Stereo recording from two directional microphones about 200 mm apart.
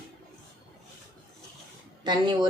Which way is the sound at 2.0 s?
20° right (ahead or behind).